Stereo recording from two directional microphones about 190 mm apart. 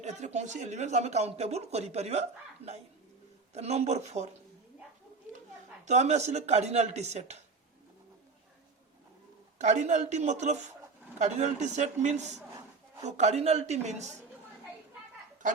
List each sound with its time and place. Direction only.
0.0 s speech: 35° right (ahead or behind)
5.8 s speech: 40° right (ahead or behind)
9.6 s speech: 40° right (ahead or behind)